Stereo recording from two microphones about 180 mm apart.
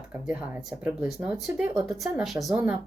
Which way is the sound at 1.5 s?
5° right (ahead or behind).